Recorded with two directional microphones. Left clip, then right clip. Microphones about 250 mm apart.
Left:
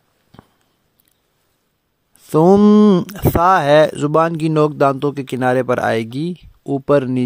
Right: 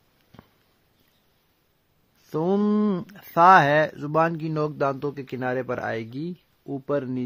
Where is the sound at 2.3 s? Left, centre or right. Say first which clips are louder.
Left 13 dB; left.